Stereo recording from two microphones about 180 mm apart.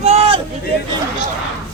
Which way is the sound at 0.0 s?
35° right (ahead or behind).